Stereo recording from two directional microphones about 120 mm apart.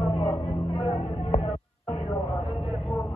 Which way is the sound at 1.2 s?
60° left (ahead or behind).